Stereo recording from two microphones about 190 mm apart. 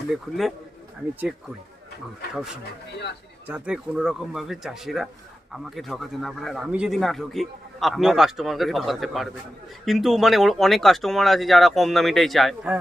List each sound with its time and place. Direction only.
0.1 s a man's voice: centre (ahead or behind)
3.4 s a man's voice: 5° right (ahead or behind)